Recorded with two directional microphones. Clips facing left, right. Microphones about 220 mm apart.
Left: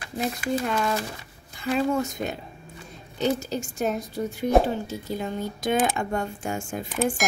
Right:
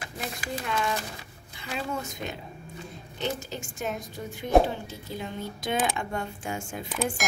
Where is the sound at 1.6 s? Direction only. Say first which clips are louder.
Left 9 dB; 45° left (ahead or behind).